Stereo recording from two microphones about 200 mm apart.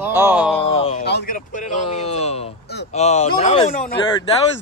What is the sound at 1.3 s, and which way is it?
Speech, 40° left (ahead or behind).